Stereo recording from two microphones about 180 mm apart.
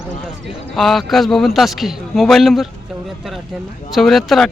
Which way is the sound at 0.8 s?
Centre (ahead or behind).